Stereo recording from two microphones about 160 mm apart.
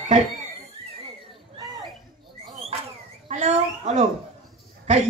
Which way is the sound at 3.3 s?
45° right (ahead or behind).